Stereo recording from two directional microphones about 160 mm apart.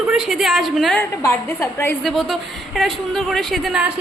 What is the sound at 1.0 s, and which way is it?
Speech, 15° left (ahead or behind).